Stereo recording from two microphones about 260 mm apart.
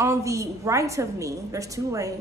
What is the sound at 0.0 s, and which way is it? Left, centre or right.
Speech, centre.